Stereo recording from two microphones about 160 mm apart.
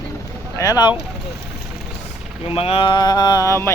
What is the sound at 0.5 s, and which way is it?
Speech, 20° left (ahead or behind).